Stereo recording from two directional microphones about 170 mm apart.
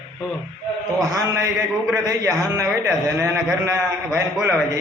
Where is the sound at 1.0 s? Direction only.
20° right (ahead or behind).